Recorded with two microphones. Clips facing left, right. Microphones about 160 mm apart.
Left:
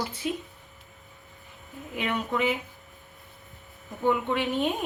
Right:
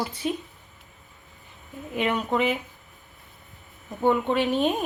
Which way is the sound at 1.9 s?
30° right (ahead or behind).